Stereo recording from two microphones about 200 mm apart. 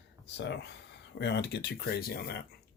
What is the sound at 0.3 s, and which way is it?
Speech, 60° left (ahead or behind).